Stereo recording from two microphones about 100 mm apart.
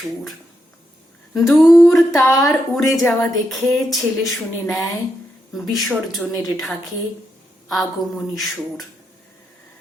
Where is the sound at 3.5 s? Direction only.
Centre (ahead or behind).